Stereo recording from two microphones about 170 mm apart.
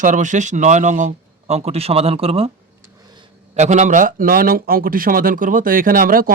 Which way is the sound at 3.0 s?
25° right (ahead or behind).